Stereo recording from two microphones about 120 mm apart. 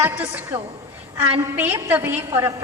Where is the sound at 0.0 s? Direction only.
15° right (ahead or behind).